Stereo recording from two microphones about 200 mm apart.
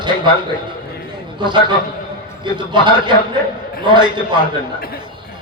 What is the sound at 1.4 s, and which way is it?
A man's voice, 25° right (ahead or behind).